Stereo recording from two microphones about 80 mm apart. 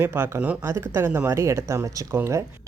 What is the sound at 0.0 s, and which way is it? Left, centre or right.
Speech, right.